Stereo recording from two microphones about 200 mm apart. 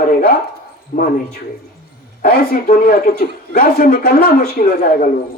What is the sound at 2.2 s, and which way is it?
A man's voice, 45° left (ahead or behind).